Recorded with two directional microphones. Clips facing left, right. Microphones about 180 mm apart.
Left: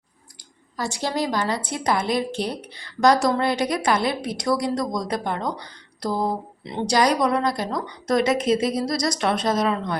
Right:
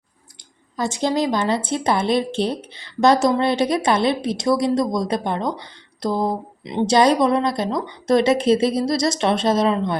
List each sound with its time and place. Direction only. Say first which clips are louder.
0.8 s a woman's voice: right 5 dB; 20° right (ahead or behind)